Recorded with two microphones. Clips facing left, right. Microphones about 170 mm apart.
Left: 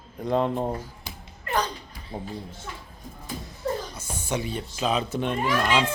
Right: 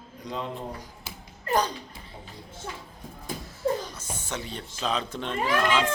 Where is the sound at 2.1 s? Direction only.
50° left (ahead or behind).